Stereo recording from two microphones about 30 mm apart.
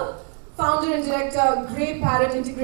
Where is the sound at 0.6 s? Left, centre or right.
Centre.